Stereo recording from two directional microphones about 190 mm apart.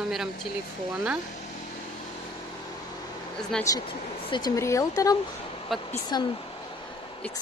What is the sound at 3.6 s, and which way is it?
Speech, 20° left (ahead or behind).